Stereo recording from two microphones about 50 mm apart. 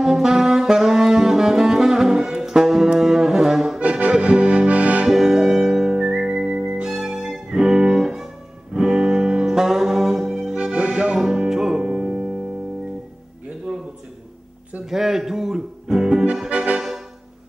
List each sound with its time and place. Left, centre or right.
0.0 s saxophone: centre
3.8 s accordion: right
5.1 s music: centre
6.6 s organ: centre
7.0 s music: centre
10.5 s accordion: right
11.1 s music: centre
11.8 s music: right
13.7 s a sound: centre
14.9 s music: centre
16.4 s music: right